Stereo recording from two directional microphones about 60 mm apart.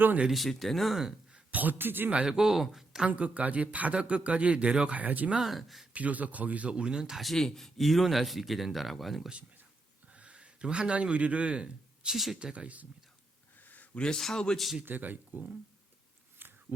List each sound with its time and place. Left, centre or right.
0.3 s speech: centre
1.5 s a man's voice: right
2.0 s speech: centre
3.1 s speech: right
5.3 s speech: centre
5.9 s speech: right
7.2 s speech: centre
10.1 s speech: right
12.1 s speech: centre
12.4 s speech: centre
13.7 s a sound: left
14.0 s speech: centre
14.8 s speech: right
16.4 s a sound: right